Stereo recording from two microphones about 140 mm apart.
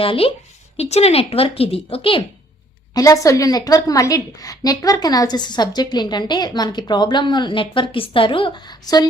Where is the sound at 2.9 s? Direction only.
25° left (ahead or behind).